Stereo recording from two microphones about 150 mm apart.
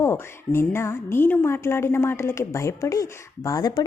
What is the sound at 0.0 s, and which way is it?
A woman's voice, 15° left (ahead or behind).